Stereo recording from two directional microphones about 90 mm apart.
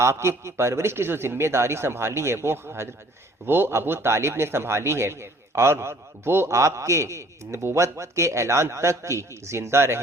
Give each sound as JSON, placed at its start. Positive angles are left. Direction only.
{"t": 0.0, "sound": "a man's voice", "side_deg": -30}